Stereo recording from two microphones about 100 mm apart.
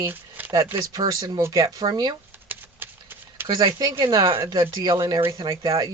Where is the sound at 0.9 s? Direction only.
35° right (ahead or behind).